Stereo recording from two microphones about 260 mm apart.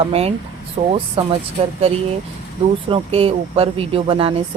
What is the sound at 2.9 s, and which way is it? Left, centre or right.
A woman's voice, right.